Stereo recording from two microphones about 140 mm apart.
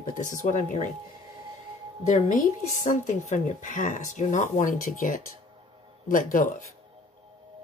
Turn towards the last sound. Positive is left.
turn(degrees=70)  # may be behind; listen again after turning